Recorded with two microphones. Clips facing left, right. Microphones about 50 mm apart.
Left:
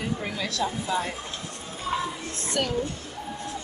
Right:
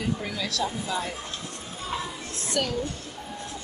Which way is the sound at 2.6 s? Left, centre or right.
Left.